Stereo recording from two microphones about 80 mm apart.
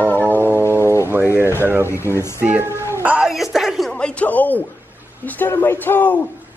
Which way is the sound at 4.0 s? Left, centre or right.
Centre.